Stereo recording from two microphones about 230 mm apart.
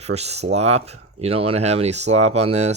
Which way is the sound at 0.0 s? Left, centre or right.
Right.